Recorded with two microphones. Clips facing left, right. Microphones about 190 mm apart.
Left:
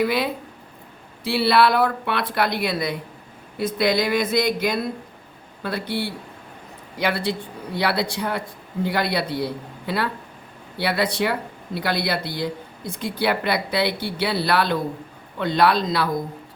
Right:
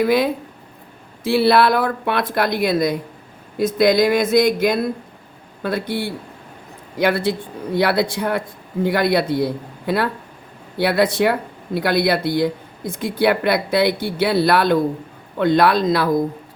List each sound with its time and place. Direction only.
0.0 s speech: 45° right (ahead or behind)